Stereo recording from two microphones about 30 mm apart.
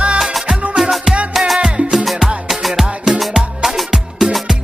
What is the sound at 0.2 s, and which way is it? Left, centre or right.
Music, centre.